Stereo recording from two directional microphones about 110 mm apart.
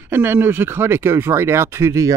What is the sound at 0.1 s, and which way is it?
Speech, 20° right (ahead or behind).